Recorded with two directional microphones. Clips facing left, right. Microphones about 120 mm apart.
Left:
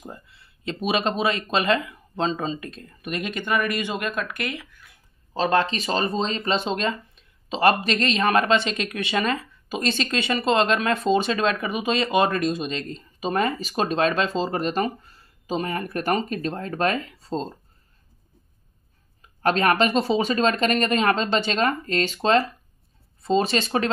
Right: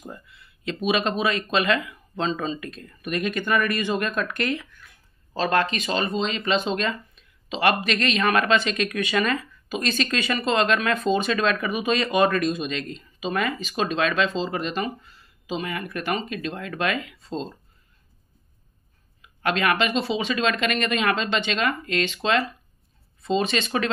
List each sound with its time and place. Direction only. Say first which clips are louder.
0.0 s a sound: even; 30° left (ahead or behind)
0.8 s speech: even; 30° left (ahead or behind); by 4.8 s 10° left (ahead or behind)
5.3 s speech: left 1 dB; 25° left (ahead or behind); by 17.6 s 40° left (ahead or behind)
19.4 s speech: left 3 dB; 40° left (ahead or behind)